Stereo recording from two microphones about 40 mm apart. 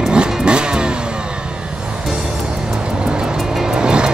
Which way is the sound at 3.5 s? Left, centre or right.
Centre.